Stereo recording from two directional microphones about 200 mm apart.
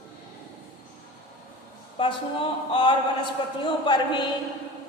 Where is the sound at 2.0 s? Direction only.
25° left (ahead or behind).